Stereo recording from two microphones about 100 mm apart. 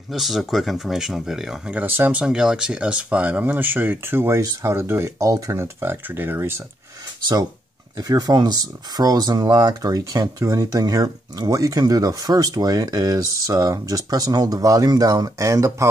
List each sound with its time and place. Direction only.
0.1 s speech: centre (ahead or behind)
1.8 s speech: 20° right (ahead or behind)
8.0 s speech: 40° right (ahead or behind)